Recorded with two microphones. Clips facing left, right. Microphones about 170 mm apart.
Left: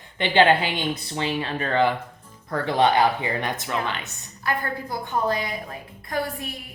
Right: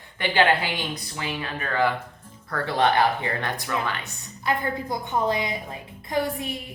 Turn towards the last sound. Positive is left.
turn(degrees=-20)  # may be behind; listen again after turning